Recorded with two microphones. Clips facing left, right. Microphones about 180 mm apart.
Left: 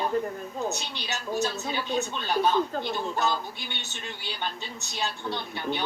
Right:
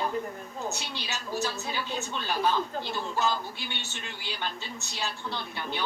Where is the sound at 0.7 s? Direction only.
20° left (ahead or behind).